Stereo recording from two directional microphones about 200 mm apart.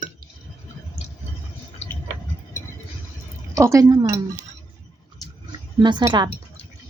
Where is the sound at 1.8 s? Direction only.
35° left (ahead or behind).